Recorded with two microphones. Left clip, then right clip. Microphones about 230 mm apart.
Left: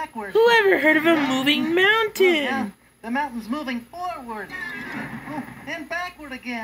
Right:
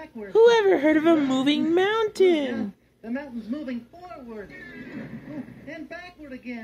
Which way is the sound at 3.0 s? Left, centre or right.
Left.